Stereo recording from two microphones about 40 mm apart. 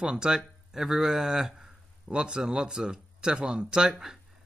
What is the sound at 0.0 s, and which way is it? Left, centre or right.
A man's voice, centre.